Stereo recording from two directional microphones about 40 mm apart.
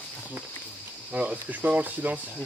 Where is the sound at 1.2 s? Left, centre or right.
Right.